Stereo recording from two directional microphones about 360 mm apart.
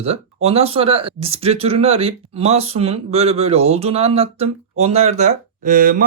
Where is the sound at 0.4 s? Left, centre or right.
Centre.